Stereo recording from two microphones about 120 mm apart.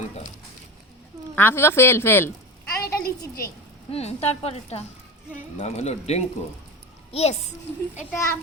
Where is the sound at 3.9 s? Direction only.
55° left (ahead or behind).